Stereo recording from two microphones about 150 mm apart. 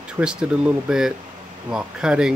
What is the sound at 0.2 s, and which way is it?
Speech, 5° right (ahead or behind).